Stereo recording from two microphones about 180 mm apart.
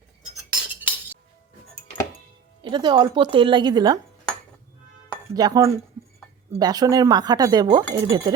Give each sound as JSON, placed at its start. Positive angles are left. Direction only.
{"t": 0.5, "sound": "cutlery", "side_deg": -10}
{"t": 2.6, "sound": "speech", "side_deg": -25}
{"t": 5.3, "sound": "speech", "side_deg": -20}